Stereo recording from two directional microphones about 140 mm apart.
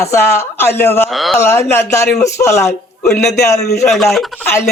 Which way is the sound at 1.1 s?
Centre (ahead or behind).